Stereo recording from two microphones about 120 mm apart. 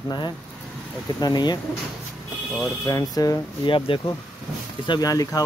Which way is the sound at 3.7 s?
45° left (ahead or behind).